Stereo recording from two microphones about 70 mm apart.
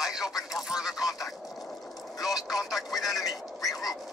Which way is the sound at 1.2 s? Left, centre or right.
Centre.